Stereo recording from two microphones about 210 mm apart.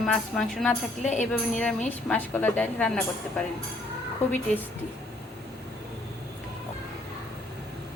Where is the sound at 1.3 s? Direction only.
5° left (ahead or behind).